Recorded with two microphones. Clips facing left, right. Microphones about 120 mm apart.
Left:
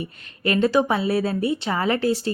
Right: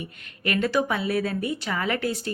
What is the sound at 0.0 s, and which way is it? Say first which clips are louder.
A woman's voice: left 5 dB; 30° left (ahead or behind).